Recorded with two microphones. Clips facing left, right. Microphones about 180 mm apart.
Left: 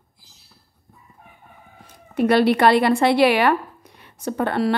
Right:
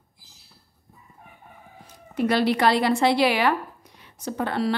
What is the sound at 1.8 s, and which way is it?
Speech, 55° left (ahead or behind).